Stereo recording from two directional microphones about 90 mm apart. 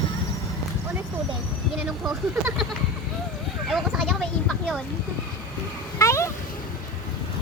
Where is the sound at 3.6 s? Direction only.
Centre (ahead or behind).